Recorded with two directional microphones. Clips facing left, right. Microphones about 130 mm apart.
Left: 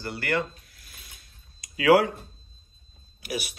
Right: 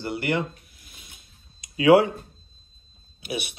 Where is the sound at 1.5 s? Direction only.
25° right (ahead or behind).